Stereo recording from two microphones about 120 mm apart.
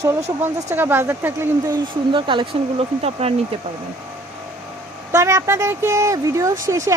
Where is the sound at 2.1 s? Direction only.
45° right (ahead or behind).